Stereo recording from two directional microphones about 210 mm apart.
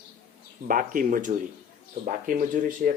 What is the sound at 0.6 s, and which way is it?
Speech, 40° right (ahead or behind).